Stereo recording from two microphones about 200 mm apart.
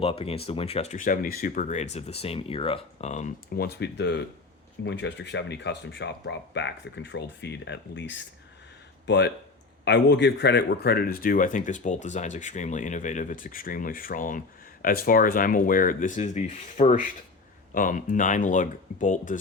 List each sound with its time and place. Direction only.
0.0 s speech: 30° left (ahead or behind)